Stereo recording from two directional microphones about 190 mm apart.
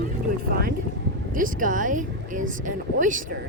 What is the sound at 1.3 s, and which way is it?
Speech, 45° right (ahead or behind).